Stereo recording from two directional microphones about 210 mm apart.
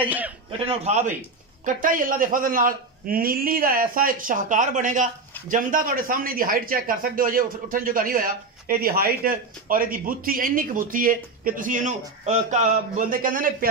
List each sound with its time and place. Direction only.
0.5 s a man's voice: 25° right (ahead or behind); by 13.7 s 40° right (ahead or behind)